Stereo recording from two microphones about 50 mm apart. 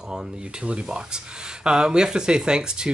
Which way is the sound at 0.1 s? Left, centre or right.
Centre.